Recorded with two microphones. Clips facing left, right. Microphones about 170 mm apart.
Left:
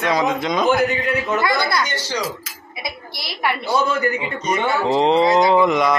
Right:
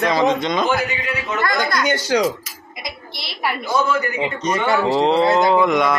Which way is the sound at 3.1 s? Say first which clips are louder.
Left 2 dB; 25° right (ahead or behind).